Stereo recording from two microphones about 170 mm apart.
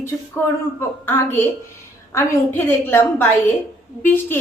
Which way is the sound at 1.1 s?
10° left (ahead or behind).